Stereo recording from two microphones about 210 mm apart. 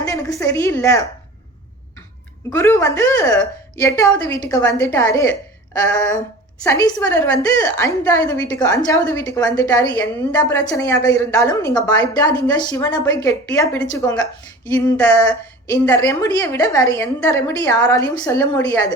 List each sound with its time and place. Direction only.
0.0 s a woman's voice: 15° left (ahead or behind)
2.5 s a woman's voice: 15° left (ahead or behind)
7.3 s a woman's voice: 15° left (ahead or behind)
8.2 s a sound: 5° left (ahead or behind)
8.5 s a woman's voice: 20° left (ahead or behind)
14.7 s a sound: 5° left (ahead or behind)
16.0 s a woman's voice: 15° left (ahead or behind)